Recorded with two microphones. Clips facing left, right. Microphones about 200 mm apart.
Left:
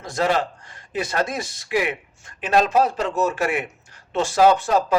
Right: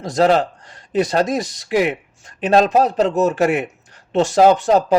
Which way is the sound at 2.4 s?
35° right (ahead or behind).